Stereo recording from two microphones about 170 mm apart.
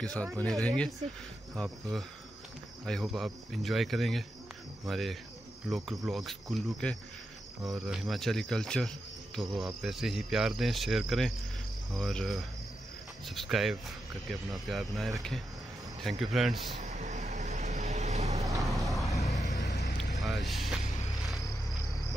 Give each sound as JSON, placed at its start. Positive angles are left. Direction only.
{"t": 0.0, "sound": "speech", "side_deg": 5}
{"t": 16.8, "sound": "vehicle", "side_deg": -45}
{"t": 18.6, "sound": "a sound", "side_deg": 0}
{"t": 19.2, "sound": "vehicle", "side_deg": 45}
{"t": 19.6, "sound": "vehicle", "side_deg": 90}
{"t": 20.2, "sound": "speech", "side_deg": 0}